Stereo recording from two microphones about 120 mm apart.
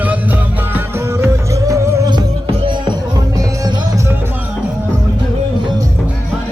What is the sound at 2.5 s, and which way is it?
Music, 45° right (ahead or behind).